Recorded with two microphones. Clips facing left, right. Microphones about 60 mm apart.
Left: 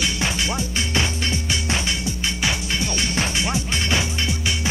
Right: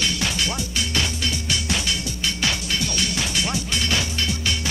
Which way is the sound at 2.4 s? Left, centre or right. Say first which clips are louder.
Left 1 dB; left.